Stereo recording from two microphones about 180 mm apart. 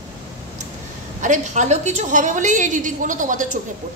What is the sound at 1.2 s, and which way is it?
A woman's voice, 45° right (ahead or behind).